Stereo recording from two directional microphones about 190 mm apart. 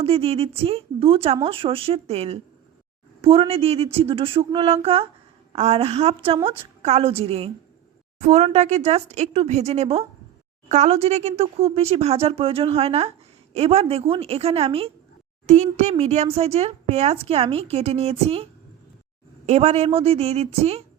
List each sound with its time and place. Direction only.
0.0 s speech: 30° right (ahead or behind)
19.5 s speech: 35° right (ahead or behind)